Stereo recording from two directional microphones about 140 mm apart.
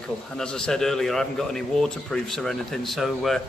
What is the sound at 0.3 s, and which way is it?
A man's voice, 5° left (ahead or behind).